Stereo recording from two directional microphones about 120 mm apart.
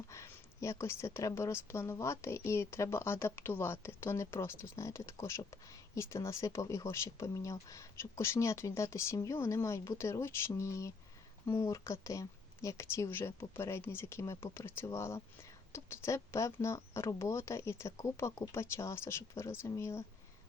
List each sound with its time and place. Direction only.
0.1 s a woman's voice: 25° left (ahead or behind)